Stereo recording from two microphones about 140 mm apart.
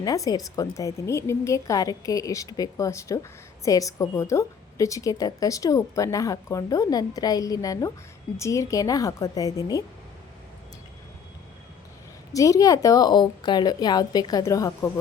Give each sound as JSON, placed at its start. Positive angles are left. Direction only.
{"t": 0.0, "sound": "a woman's voice", "side_deg": 25}
{"t": 12.3, "sound": "a woman's voice", "side_deg": 25}